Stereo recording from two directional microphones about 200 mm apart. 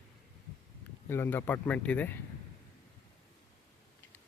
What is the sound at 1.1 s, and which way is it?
Speech, 10° left (ahead or behind).